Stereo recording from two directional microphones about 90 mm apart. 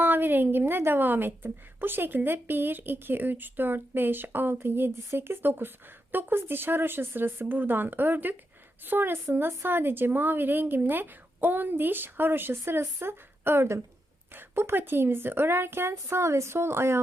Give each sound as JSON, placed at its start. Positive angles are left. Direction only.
{"t": 0.0, "sound": "a woman's voice", "side_deg": -20}